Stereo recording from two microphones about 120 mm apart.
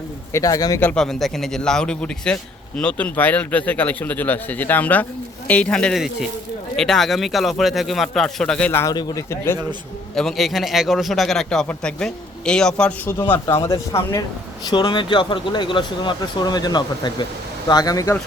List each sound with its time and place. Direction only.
0.3 s a man's voice: 30° left (ahead or behind)
0.8 s a man's voice: 10° left (ahead or behind)
8.7 s a man's voice: 25° left (ahead or behind)
10.2 s a man's voice: centre (ahead or behind)
13.2 s a man's voice: 15° left (ahead or behind)
14.7 s speech: 40° left (ahead or behind)